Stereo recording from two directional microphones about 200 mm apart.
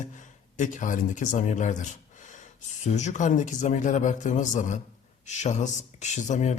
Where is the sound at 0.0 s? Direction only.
40° left (ahead or behind).